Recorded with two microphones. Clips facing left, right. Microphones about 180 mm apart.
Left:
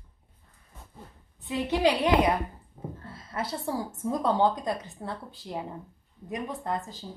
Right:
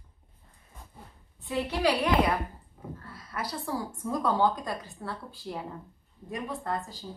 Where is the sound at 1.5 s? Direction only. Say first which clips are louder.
Left 2 dB; 20° left (ahead or behind).